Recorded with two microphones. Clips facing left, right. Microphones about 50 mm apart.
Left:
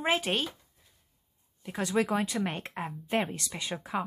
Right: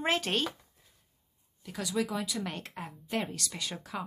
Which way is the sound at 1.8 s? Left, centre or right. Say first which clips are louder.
Left 5 dB; left.